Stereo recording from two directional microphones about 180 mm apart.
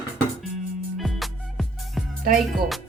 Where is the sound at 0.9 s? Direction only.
Centre (ahead or behind).